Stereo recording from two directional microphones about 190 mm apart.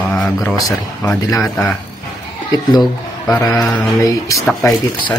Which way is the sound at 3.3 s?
15° left (ahead or behind).